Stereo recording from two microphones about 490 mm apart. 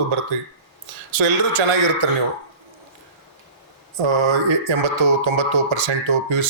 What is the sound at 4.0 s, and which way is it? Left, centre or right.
Speech, right.